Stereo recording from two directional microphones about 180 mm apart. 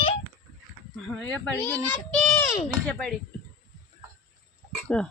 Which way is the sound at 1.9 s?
5° left (ahead or behind).